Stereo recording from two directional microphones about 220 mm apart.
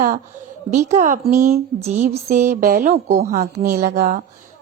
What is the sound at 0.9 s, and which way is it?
Speech, 35° right (ahead or behind).